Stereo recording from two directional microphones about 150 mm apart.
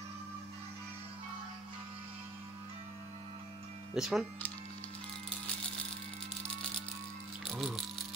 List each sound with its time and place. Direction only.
3.9 s speech: 5° right (ahead or behind)
7.4 s rattle: centre (ahead or behind)